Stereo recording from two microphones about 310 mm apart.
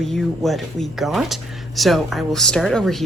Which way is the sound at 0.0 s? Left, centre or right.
Centre.